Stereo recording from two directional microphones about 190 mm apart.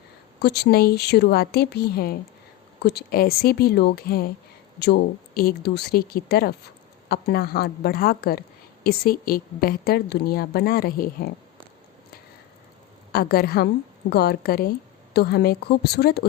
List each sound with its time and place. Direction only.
0.3 s a woman's voice: 60° left (ahead or behind)
13.1 s a woman's voice: 55° left (ahead or behind)